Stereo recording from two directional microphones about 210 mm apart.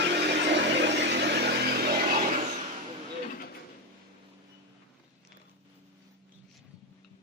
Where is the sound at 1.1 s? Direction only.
55° right (ahead or behind).